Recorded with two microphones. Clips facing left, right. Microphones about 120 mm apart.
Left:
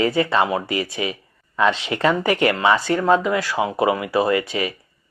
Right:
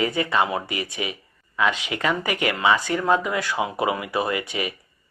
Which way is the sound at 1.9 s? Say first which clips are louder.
Left 5 dB; 30° left (ahead or behind).